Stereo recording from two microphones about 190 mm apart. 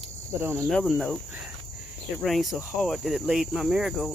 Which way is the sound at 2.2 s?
Centre (ahead or behind).